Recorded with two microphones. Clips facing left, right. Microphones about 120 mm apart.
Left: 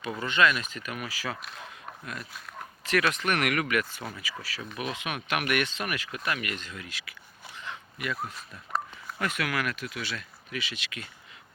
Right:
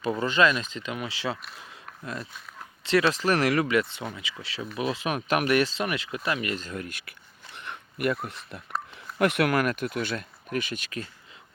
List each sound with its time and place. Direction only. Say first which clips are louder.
0.0 s speech: right 3 dB; 30° right (ahead or behind)
2.8 s speech: right 4 dB; 30° right (ahead or behind)
6.7 s speech: right 6 dB; 45° right (ahead or behind)
7.5 s dog: right 2 dB; 55° right (ahead or behind); by 8.6 s 70° right (ahead or behind)
9.1 s speech: right 8 dB; 60° right (ahead or behind); by 11.1 s 40° right (ahead or behind)